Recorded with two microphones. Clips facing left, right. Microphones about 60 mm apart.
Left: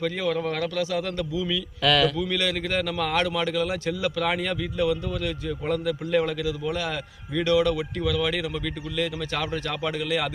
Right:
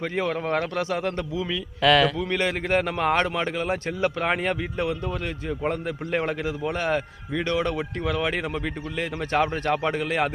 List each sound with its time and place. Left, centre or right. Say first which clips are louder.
0.0 s a man's voice: even; right
1.8 s speech: right 3 dB; right
2.1 s a man's voice: right 1 dB; right